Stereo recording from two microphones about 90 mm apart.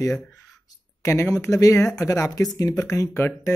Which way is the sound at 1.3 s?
40° left (ahead or behind).